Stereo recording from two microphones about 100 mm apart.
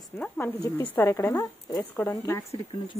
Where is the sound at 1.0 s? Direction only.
30° left (ahead or behind).